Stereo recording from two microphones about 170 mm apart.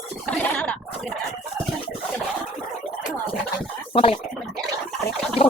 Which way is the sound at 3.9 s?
35° left (ahead or behind).